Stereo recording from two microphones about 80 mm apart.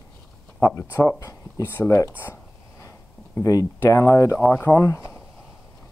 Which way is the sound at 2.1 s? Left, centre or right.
Left.